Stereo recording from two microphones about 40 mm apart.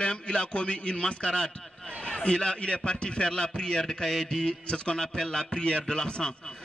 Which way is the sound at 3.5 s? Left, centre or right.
Left.